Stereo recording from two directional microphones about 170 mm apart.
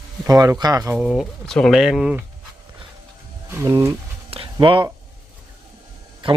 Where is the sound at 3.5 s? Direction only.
20° right (ahead or behind).